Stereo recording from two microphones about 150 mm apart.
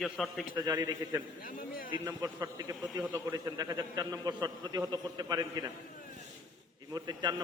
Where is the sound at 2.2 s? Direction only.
20° right (ahead or behind).